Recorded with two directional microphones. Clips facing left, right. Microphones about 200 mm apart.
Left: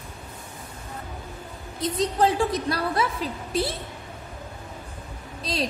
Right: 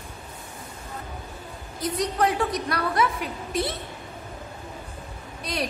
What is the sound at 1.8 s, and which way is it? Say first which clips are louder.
A woman's voice: left 2 dB; 25° left (ahead or behind).